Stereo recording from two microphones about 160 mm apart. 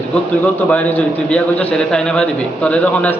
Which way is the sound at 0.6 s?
5° left (ahead or behind).